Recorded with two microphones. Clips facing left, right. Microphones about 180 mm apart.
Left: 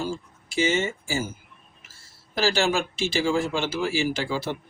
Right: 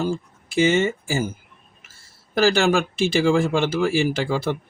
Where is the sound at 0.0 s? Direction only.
55° right (ahead or behind).